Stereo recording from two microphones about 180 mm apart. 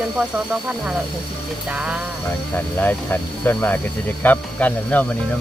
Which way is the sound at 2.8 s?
10° left (ahead or behind).